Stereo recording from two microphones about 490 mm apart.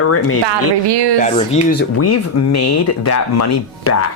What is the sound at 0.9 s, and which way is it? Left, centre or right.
Speech, right.